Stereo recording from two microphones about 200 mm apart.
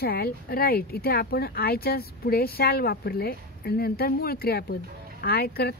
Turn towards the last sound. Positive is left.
turn(degrees=50)  # may be behind; listen again after turning